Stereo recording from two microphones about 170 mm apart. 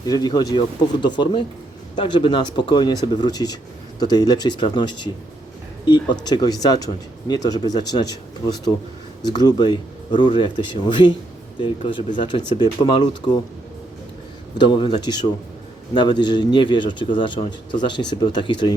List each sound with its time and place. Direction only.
0.0 s speech: 20° left (ahead or behind)
14.6 s speech: 25° left (ahead or behind)